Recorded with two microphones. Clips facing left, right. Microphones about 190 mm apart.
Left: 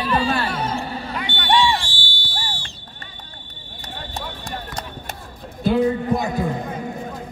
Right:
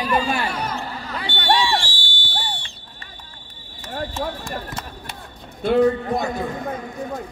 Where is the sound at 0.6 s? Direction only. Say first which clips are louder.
Left 3 dB; 30° left (ahead or behind).